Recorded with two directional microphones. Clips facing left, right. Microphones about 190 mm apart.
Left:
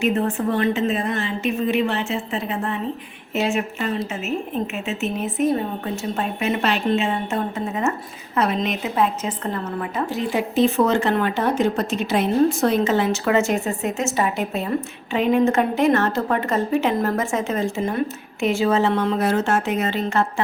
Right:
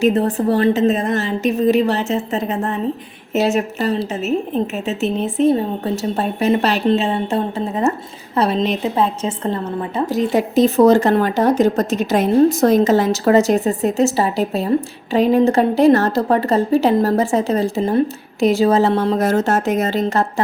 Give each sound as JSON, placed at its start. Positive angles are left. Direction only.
{"t": 0.0, "sound": "a woman's voice", "side_deg": -40}
{"t": 10.1, "sound": "a woman's voice", "side_deg": -40}